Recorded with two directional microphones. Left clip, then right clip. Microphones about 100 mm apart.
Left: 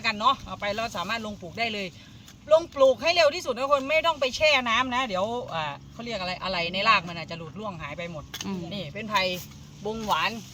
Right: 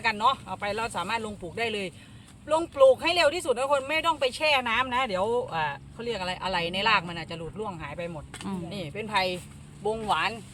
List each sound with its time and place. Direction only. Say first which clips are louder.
0.0 s speech: left 1 dB; 45° right (ahead or behind)
10.1 s speech: left 2 dB; 25° right (ahead or behind)